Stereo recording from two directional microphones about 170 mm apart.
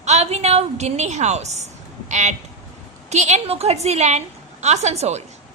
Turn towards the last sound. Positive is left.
turn(degrees=-40)  # may be behind; listen again after turning